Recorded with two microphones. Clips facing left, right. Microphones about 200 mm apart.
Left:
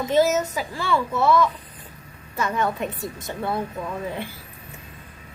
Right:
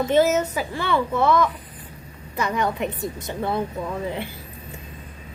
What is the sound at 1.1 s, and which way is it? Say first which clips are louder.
Speech: even; 10° left (ahead or behind).